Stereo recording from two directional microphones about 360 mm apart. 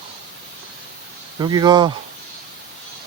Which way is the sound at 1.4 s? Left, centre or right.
Centre.